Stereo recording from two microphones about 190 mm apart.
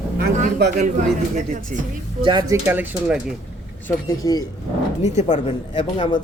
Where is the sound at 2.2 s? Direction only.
25° right (ahead or behind).